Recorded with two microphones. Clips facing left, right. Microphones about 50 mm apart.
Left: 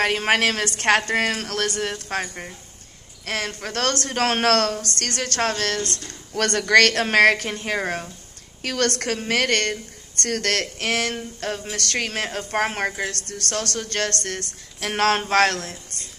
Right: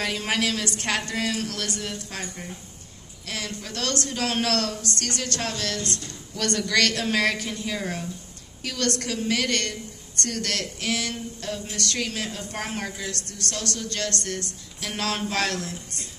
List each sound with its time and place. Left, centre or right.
0.0 s speech: left